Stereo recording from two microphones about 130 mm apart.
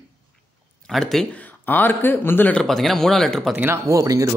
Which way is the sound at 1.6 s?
15° left (ahead or behind).